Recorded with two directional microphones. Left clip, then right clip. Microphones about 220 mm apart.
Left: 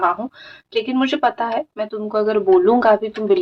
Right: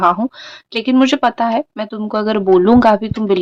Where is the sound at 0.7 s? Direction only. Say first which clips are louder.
Right 5 dB; 45° right (ahead or behind).